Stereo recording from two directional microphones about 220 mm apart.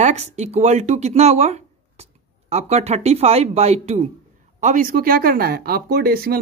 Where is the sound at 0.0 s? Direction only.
30° right (ahead or behind).